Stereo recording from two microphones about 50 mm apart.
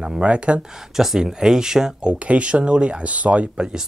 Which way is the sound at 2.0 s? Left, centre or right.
Right.